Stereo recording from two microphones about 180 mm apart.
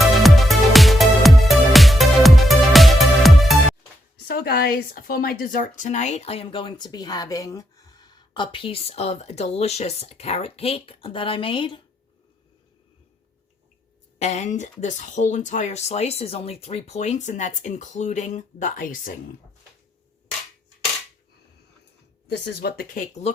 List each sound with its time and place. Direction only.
0.0 s music: centre (ahead or behind)
4.3 s speech: 60° left (ahead or behind); by 11.8 s 30° left (ahead or behind)
14.2 s speech: 40° left (ahead or behind)
22.3 s speech: 65° left (ahead or behind); by 23.3 s 40° left (ahead or behind)